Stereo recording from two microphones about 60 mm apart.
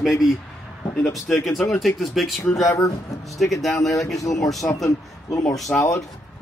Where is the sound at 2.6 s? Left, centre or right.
Left.